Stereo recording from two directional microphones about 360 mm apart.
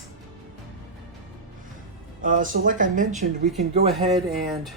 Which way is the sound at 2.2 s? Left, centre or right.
Right.